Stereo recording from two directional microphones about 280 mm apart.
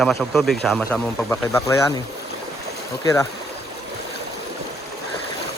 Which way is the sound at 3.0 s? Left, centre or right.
Centre.